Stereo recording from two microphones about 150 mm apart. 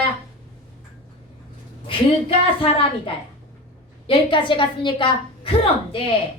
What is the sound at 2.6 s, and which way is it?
A woman's voice, 35° left (ahead or behind).